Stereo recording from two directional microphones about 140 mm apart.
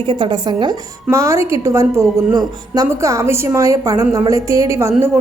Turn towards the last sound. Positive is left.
turn(degrees=-20)  # may be behind; listen again after turning